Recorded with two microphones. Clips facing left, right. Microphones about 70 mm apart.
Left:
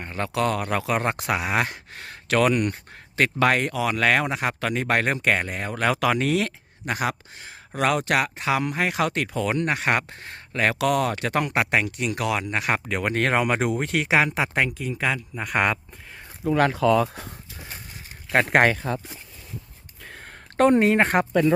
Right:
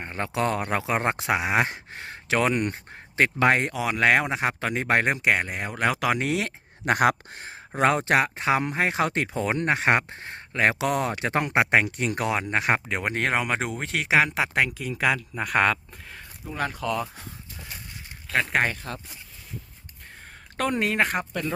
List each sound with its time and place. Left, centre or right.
0.0 s speech: right
5.1 s speech: centre
6.8 s speech: right
7.8 s speech: right
11.8 s speech: right
12.9 s speech: centre
13.4 s speech: centre
16.5 s speech: left
18.4 s speech: left
20.1 s a sound: left
20.6 s speech: left